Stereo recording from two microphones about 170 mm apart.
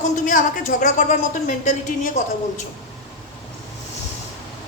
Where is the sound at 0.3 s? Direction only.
50° left (ahead or behind).